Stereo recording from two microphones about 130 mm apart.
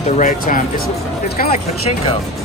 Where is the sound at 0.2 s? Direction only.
75° left (ahead or behind).